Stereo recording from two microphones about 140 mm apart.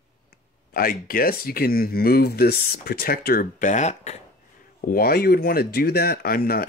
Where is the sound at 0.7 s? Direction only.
90° left; by 4.2 s 55° left (ahead or behind).